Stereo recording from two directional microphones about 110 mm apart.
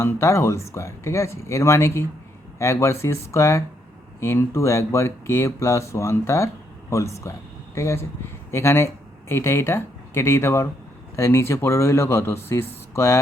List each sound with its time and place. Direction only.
0.0 s speech: 25° left (ahead or behind)